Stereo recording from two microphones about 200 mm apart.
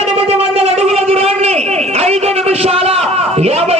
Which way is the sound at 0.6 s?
30° right (ahead or behind).